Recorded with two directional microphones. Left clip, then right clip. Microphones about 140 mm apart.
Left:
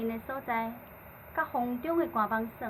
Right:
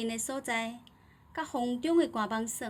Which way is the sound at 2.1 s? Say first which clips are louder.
Left 3 dB; 90° right.